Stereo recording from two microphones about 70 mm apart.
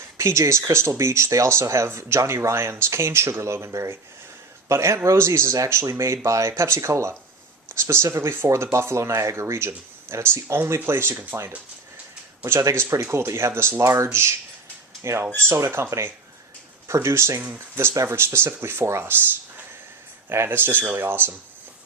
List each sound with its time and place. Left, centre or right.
0.2 s speech: right
12.5 s speech: right
20.3 s speech: right